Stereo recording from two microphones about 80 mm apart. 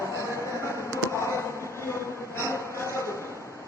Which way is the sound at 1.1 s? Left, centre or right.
Left.